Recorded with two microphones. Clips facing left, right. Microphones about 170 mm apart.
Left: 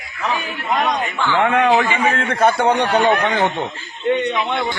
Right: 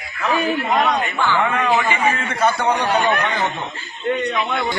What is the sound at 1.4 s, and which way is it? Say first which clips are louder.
A man's voice: left 4 dB; 65° left (ahead or behind).